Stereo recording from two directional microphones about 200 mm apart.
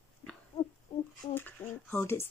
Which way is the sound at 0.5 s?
30° left (ahead or behind).